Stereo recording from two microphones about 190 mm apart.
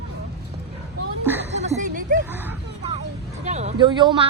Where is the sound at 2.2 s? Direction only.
10° right (ahead or behind).